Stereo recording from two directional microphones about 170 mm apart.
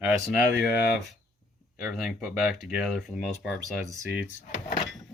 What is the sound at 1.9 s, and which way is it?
Speech, 5° right (ahead or behind).